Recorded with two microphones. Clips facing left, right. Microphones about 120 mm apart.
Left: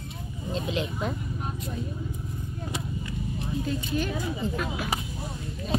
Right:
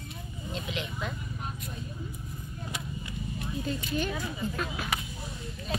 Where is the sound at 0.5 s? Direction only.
30° left (ahead or behind).